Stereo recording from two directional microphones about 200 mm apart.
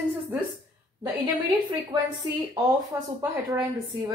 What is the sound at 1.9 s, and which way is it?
A woman's voice, 20° right (ahead or behind).